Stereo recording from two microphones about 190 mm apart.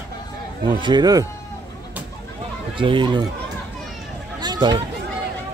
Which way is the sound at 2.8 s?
25° right (ahead or behind).